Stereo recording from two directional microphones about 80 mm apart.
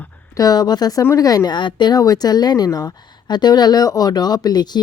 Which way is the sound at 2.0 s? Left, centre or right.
Left.